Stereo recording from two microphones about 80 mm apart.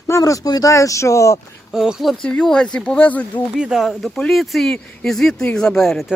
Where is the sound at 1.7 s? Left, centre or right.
Centre.